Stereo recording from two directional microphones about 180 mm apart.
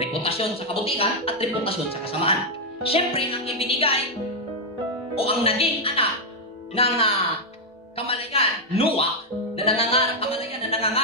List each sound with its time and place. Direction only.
0.0 s speech: 35° left (ahead or behind)
5.1 s speech: 35° left (ahead or behind)
9.7 s music: 30° left (ahead or behind)